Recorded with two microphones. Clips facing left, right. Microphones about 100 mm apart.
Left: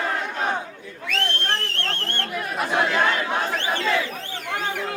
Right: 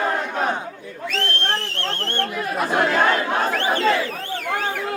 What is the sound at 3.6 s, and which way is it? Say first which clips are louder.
Speech: right 5 dB; 50° right (ahead or behind).